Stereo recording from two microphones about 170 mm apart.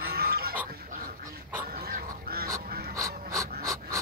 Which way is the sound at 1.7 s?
65° right (ahead or behind).